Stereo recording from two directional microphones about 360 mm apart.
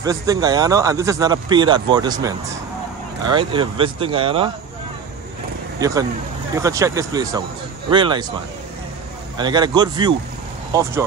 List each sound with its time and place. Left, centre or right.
0.0 s speech: centre
5.8 s speech: centre
9.4 s speech: centre